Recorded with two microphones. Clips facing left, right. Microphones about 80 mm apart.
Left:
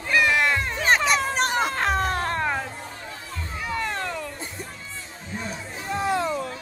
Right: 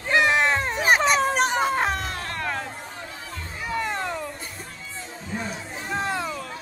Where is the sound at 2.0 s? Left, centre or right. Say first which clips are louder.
Left 7 dB; left.